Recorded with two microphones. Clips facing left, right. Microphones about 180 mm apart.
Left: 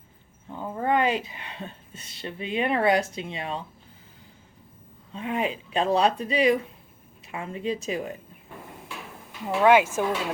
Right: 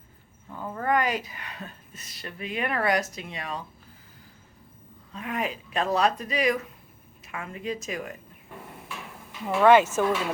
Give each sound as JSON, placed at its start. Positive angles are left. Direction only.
{"t": 0.5, "sound": "a woman's voice", "side_deg": 20}
{"t": 5.1, "sound": "a woman's voice", "side_deg": 30}
{"t": 9.6, "sound": "speech", "side_deg": 10}